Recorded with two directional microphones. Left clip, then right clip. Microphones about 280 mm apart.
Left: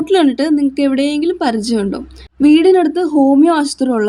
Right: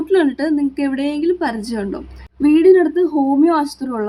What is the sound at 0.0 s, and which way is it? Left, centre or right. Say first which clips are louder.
Speech: left 3 dB; left.